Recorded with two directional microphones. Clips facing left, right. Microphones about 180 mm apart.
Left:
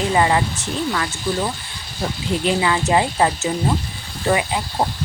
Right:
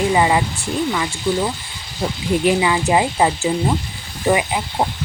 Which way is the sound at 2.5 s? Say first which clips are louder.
Right 1 dB; 15° right (ahead or behind).